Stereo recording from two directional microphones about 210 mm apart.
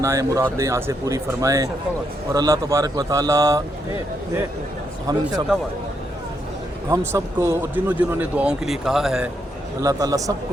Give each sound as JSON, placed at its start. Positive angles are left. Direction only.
{"t": 0.0, "sound": "speech", "side_deg": -15}
{"t": 5.1, "sound": "speech", "side_deg": -15}
{"t": 6.9, "sound": "speech", "side_deg": -10}
{"t": 9.8, "sound": "speech", "side_deg": -15}